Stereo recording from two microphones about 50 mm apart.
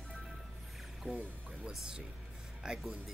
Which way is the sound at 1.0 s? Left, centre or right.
Right.